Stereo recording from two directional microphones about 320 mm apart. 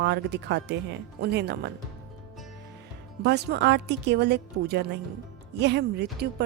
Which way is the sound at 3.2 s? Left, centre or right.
Right.